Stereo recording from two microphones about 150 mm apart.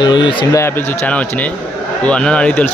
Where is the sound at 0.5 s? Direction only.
15° left (ahead or behind).